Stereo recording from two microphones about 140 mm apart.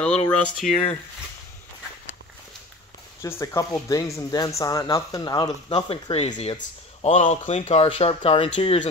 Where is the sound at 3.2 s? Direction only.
20° left (ahead or behind); by 6.3 s 40° left (ahead or behind).